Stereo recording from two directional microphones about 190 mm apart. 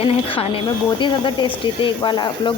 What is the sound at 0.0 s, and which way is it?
A woman's voice, 30° left (ahead or behind).